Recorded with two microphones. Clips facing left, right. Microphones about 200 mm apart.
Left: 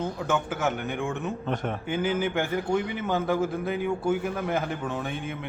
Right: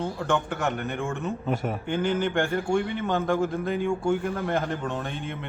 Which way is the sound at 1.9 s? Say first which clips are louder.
Right 1 dB; 5° left (ahead or behind).